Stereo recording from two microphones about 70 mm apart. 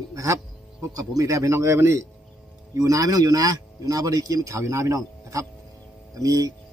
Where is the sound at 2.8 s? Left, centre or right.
Right.